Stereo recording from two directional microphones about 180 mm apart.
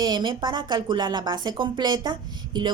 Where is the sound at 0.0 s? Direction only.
25° right (ahead or behind).